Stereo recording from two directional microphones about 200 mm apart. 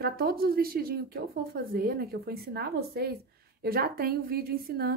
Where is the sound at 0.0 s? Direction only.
50° right (ahead or behind).